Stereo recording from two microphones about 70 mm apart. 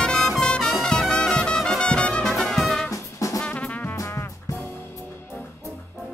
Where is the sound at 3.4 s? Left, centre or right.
Left.